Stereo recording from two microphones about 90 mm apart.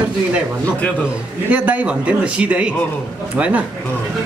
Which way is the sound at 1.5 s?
15° right (ahead or behind).